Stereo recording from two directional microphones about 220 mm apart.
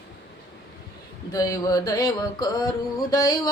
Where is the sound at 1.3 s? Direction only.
15° left (ahead or behind).